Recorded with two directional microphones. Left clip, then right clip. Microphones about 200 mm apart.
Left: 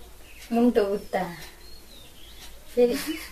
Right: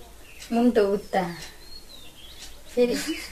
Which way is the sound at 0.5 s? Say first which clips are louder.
Left 1 dB; 10° right (ahead or behind).